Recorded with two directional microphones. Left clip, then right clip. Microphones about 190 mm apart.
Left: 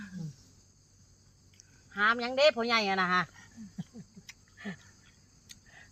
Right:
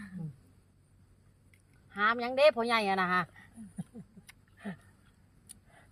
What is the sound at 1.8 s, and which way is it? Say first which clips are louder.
Speech: left 2 dB; 5° right (ahead or behind).